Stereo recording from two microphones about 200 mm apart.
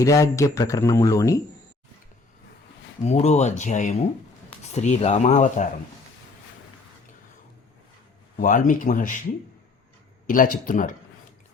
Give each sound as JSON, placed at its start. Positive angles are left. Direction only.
{"t": 0.0, "sound": "speech", "side_deg": 15}
{"t": 3.0, "sound": "speech", "side_deg": 35}
{"t": 8.4, "sound": "speech", "side_deg": 40}
{"t": 10.2, "sound": "speech", "side_deg": 45}